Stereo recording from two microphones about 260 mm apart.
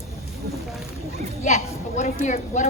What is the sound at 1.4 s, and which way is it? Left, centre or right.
A woman's voice, left.